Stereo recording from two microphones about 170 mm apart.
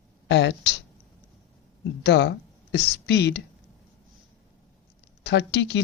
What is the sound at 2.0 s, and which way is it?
Speech, 90° left.